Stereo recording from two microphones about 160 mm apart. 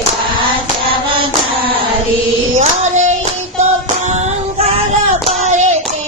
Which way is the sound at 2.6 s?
50° right (ahead or behind).